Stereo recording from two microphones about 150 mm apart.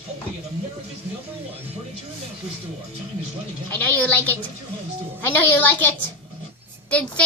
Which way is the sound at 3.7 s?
10° left (ahead or behind).